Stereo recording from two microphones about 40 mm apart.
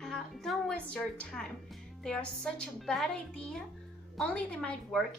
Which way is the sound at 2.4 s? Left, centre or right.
Centre.